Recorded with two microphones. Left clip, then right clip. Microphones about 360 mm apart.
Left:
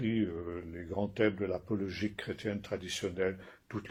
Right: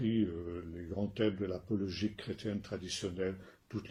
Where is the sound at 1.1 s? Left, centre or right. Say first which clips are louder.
Left 3 dB; centre.